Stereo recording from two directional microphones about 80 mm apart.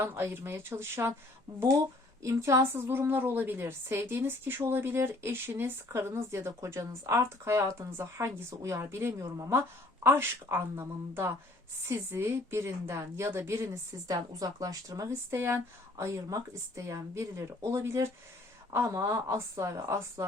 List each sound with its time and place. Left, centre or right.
0.0 s a woman's voice: right
15.4 s a woman's voice: right